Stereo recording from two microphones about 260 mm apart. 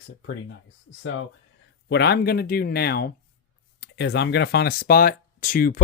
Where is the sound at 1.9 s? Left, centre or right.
Left.